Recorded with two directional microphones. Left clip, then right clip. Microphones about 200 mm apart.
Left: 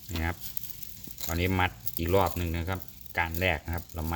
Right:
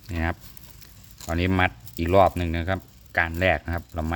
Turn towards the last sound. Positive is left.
turn(degrees=-50)  # may be behind; listen again after turning